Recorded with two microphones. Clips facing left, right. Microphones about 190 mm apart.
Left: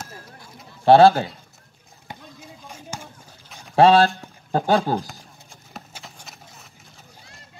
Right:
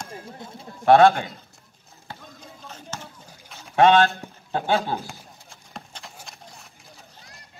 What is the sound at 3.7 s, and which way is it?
Speech, 35° left (ahead or behind).